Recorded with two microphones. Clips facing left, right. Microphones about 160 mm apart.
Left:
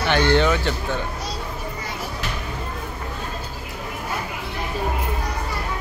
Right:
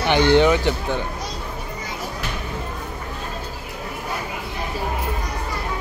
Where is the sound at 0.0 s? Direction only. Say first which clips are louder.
Right 3 dB; 15° right (ahead or behind).